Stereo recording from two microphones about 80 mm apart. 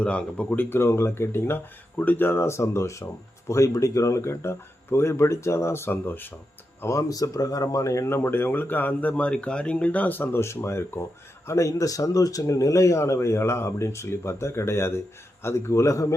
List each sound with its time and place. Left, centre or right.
0.0 s speech: centre
6.8 s speech: left